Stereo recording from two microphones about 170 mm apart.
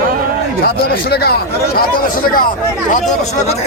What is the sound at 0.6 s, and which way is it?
Speech, 65° left (ahead or behind).